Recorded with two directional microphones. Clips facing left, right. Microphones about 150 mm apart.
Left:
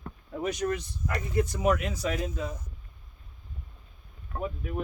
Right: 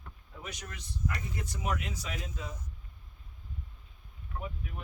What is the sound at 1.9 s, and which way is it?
Speech, 45° left (ahead or behind).